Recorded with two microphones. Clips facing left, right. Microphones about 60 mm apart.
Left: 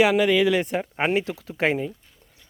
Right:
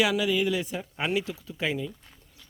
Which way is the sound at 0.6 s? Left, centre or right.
Left.